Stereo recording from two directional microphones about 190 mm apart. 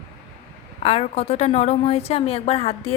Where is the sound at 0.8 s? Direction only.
35° left (ahead or behind).